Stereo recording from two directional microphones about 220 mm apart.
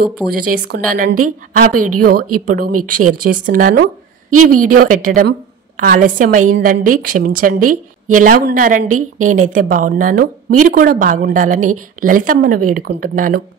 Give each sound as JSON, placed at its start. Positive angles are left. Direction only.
{"t": 0.3, "sound": "a woman's voice", "side_deg": -40}